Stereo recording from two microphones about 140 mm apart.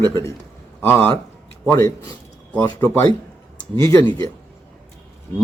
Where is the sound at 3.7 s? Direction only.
25° left (ahead or behind).